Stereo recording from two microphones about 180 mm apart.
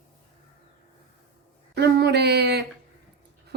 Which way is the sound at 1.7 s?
65° right (ahead or behind).